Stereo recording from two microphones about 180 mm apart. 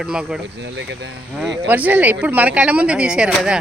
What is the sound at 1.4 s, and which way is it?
Speech, 10° right (ahead or behind).